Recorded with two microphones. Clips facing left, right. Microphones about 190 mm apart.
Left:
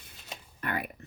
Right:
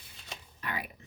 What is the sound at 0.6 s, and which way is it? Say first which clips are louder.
Computer keyboard: left 5 dB; 55° left (ahead or behind).